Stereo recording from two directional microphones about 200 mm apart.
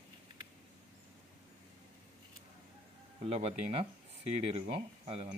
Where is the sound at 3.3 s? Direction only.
30° right (ahead or behind).